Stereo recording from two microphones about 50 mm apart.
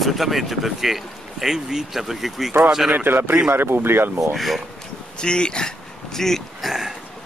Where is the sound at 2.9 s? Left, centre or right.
Right.